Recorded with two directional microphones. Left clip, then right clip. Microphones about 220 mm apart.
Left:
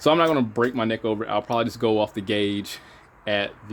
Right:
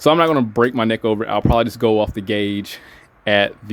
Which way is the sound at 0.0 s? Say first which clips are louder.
Right 5 dB; 20° right (ahead or behind).